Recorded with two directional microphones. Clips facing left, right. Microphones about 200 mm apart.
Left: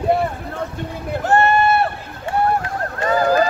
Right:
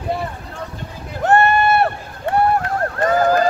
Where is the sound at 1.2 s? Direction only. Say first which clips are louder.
Right 1 dB; 60° right (ahead or behind).